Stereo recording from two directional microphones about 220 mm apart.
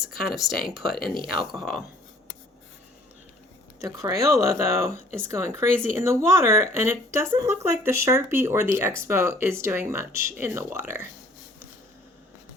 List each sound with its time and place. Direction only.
0.7 s speech: centre (ahead or behind)
0.9 s speech: 40° left (ahead or behind)
1.5 s speech: centre (ahead or behind)
3.8 s speech: 15° right (ahead or behind)